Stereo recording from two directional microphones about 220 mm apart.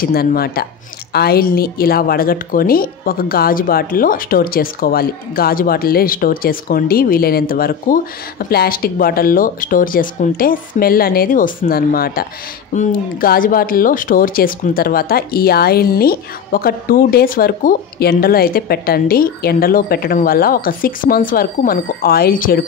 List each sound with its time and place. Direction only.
0.0 s a woman's voice: 40° left (ahead or behind)